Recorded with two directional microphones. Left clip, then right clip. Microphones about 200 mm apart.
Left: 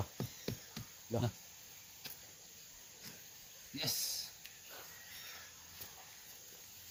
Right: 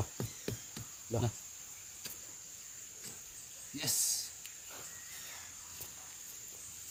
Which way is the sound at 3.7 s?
10° right (ahead or behind).